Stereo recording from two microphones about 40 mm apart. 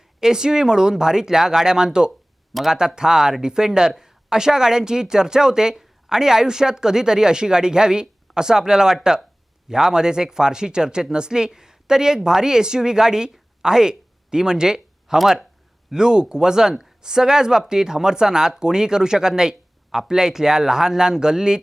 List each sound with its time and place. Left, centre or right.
0.2 s speech: centre
13.3 s a sound: centre
15.2 s speech: centre
15.9 s speech: centre